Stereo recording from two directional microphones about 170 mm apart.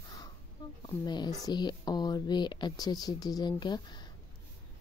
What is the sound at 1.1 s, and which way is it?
Speech, 25° left (ahead or behind).